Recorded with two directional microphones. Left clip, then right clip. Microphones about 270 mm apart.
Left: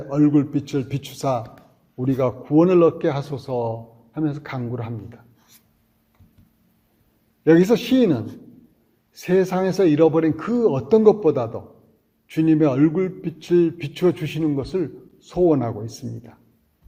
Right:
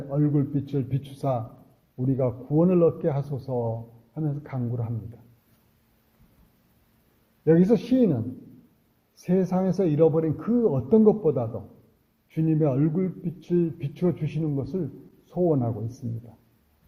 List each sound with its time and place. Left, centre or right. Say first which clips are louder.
0.1 s a man's voice: left 8 dB; centre
7.4 s a man's voice: left 5 dB; centre